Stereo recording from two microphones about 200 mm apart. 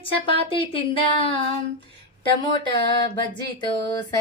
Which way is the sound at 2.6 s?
25° left (ahead or behind).